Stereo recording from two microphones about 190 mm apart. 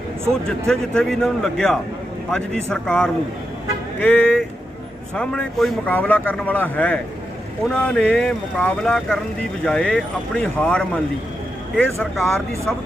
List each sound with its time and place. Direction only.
0.4 s a man's voice: 5° left (ahead or behind)